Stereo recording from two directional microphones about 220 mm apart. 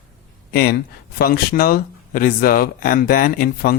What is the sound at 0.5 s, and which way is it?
Speech, 45° left (ahead or behind).